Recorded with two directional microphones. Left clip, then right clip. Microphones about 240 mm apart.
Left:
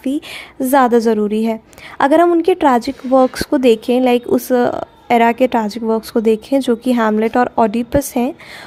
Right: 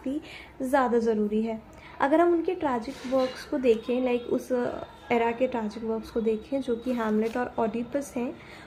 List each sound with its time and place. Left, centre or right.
0.6 s a woman's voice: left